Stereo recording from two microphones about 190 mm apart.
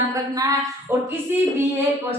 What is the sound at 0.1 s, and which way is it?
Speech, 15° right (ahead or behind).